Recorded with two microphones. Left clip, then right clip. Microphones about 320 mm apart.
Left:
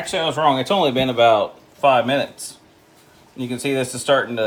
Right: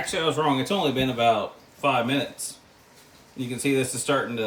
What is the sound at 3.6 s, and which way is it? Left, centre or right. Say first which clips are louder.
Speech: left 5 dB; centre.